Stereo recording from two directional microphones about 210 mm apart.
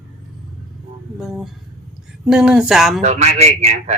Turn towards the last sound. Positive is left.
turn(degrees=-30)  # may be behind; listen again after turning